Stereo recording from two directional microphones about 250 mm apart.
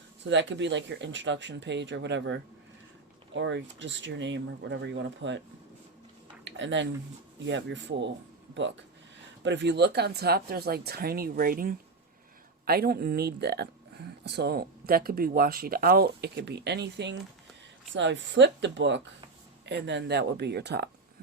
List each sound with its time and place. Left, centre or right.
0.3 s speech: right
6.4 s a sound: right
7.4 s speech: right
9.4 s speech: right